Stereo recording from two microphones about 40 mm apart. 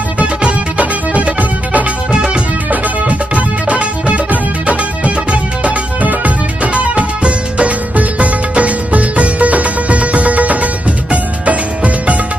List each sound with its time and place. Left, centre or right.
0.4 s music: right